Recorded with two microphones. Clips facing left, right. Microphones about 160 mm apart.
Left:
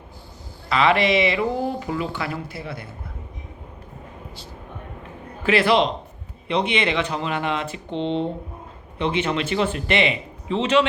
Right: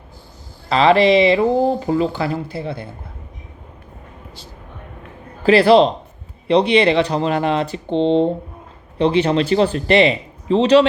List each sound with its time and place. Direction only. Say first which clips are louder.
0.7 s speech: right 6 dB; 30° right (ahead or behind)
5.4 s a man's voice: right 7 dB; 35° right (ahead or behind)